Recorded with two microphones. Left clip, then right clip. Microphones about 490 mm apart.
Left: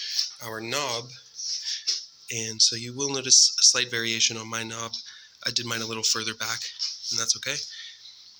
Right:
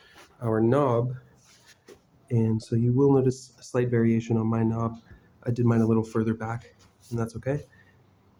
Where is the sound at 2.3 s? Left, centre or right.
Right.